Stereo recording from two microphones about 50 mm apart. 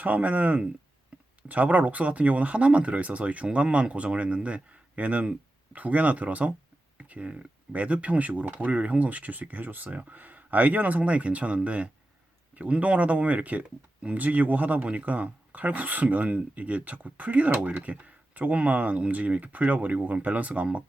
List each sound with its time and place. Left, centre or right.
0.0 s speech: right